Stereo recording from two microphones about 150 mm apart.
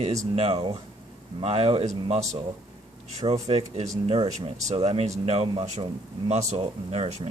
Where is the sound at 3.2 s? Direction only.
45° right (ahead or behind).